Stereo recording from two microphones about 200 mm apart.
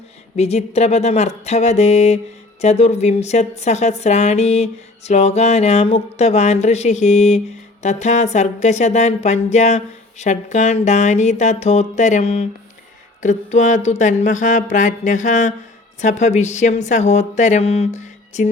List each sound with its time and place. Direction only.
0.3 s a woman's voice: 30° left (ahead or behind)